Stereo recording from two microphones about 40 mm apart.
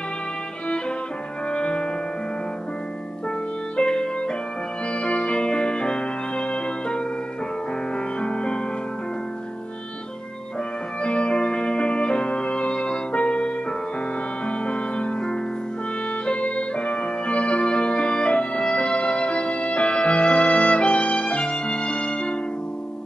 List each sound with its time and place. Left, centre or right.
1.5 s music: left
3.7 s music: left
8.2 s music: left
11.0 s music: left